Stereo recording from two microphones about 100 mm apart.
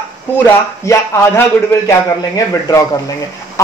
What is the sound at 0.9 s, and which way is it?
A man's voice, 30° left (ahead or behind).